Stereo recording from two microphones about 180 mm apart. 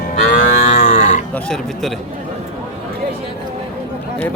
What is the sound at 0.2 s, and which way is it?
Livestock, 45° left (ahead or behind).